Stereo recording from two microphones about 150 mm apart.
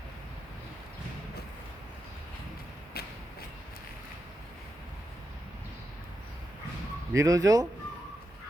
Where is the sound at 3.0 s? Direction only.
90° left.